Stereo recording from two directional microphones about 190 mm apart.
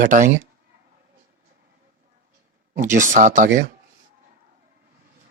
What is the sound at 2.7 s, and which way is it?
Speech, 40° right (ahead or behind).